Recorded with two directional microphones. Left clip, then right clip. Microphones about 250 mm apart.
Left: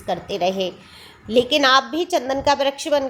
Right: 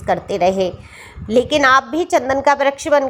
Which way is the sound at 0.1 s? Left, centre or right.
Centre.